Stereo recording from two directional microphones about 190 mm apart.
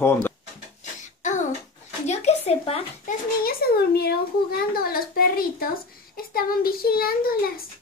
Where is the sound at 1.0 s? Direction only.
40° left (ahead or behind).